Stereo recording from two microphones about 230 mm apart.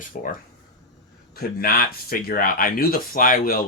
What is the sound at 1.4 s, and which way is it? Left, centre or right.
Speech, left.